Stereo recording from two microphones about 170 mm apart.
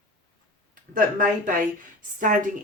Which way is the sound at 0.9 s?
50° right (ahead or behind).